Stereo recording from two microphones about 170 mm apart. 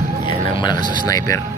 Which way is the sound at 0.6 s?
25° left (ahead or behind).